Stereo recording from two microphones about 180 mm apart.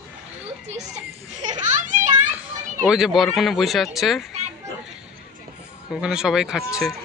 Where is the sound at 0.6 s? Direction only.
40° right (ahead or behind).